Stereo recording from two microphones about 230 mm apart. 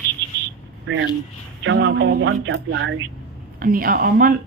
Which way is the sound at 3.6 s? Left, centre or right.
Right.